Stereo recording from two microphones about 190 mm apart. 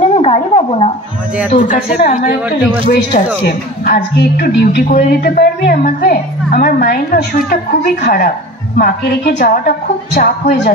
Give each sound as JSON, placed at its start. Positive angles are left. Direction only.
{"t": 0.0, "sound": "a sound", "side_deg": 35}
{"t": 1.5, "sound": "a woman's voice", "side_deg": 45}
{"t": 3.4, "sound": "a woman's voice", "side_deg": 50}
{"t": 9.4, "sound": "a woman's voice", "side_deg": 45}